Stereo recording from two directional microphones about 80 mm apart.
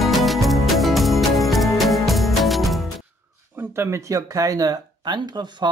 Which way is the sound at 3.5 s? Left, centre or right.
Right.